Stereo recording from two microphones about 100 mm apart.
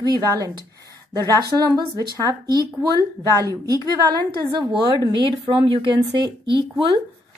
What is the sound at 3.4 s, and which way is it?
Speech, 35° right (ahead or behind).